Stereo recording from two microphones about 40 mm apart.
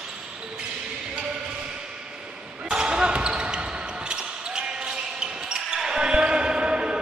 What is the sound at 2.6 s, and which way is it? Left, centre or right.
Basketball bounce, right.